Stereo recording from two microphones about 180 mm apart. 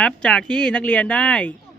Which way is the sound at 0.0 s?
5° left (ahead or behind).